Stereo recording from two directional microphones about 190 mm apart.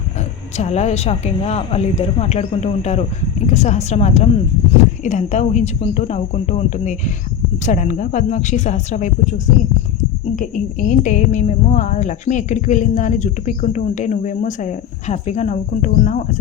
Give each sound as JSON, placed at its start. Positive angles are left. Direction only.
{"t": 0.5, "sound": "a woman's voice", "side_deg": 35}
{"t": 10.3, "sound": "a woman's voice", "side_deg": 40}